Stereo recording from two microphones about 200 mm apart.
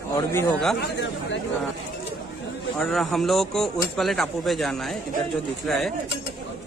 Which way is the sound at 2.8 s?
Centre (ahead or behind).